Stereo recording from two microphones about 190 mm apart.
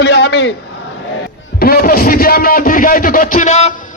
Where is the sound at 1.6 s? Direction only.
50° left (ahead or behind); by 3.8 s 35° left (ahead or behind).